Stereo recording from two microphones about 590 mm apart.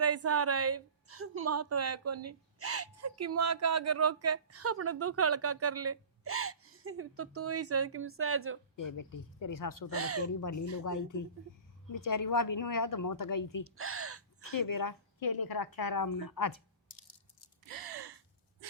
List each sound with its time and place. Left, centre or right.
0.0 s a woman's voice: right
8.7 s a woman's voice: left
9.9 s speech: right
10.8 s a woman's voice: left
13.7 s gasp: right
14.5 s a woman's voice: left
17.7 s gasp: right